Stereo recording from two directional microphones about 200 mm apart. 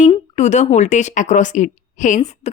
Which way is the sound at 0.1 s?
35° left (ahead or behind).